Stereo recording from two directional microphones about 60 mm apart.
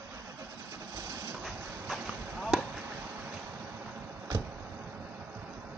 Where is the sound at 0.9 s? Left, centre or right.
Right.